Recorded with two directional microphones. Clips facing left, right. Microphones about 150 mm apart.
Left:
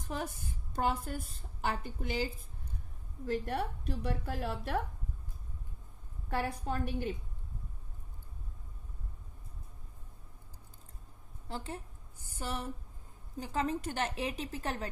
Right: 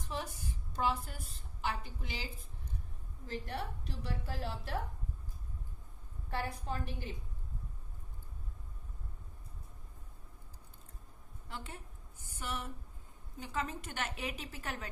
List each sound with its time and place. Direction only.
0.0 s a woman's voice: 50° left (ahead or behind)
3.3 s a woman's voice: 50° left (ahead or behind)
6.3 s a woman's voice: 50° left (ahead or behind)
11.4 s a woman's voice: 35° left (ahead or behind)